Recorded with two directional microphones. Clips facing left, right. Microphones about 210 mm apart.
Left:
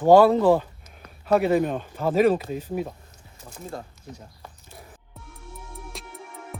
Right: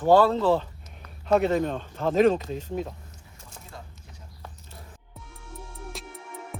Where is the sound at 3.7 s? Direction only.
40° left (ahead or behind).